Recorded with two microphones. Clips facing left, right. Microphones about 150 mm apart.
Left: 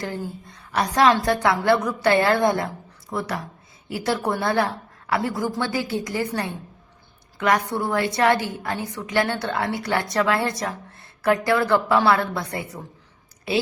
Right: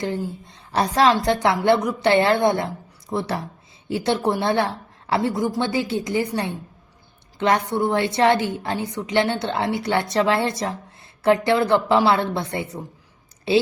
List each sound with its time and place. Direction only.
0.0 s a woman's voice: 25° right (ahead or behind)